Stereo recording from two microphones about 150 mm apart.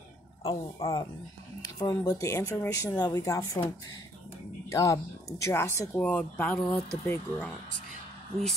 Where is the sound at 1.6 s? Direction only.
25° left (ahead or behind).